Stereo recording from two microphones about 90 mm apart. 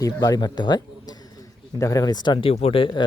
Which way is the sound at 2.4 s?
90° left.